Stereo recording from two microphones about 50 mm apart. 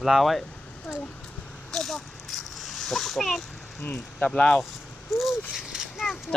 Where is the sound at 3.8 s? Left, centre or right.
Left.